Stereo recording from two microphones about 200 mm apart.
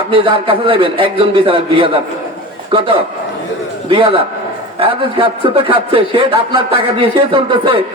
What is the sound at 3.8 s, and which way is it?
A man's voice, 25° right (ahead or behind).